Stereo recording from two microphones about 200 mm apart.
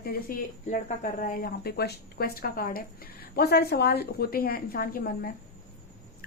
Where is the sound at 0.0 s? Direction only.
50° left (ahead or behind).